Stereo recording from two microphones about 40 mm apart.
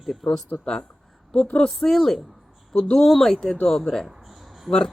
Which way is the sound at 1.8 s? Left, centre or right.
Centre.